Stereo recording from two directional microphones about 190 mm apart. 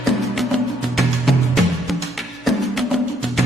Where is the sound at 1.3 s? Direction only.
Centre (ahead or behind).